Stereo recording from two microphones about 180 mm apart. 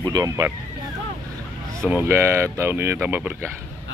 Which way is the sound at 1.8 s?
10° right (ahead or behind).